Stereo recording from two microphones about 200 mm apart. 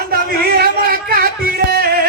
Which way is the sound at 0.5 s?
45° right (ahead or behind).